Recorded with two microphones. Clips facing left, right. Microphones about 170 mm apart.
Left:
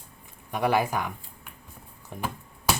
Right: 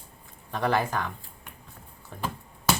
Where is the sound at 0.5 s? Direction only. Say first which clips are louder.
Left 2 dB; 10° left (ahead or behind).